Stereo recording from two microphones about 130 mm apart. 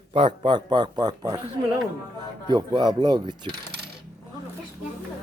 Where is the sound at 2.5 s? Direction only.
35° right (ahead or behind).